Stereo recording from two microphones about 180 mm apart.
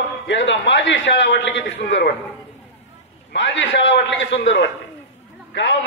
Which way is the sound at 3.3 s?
90° left.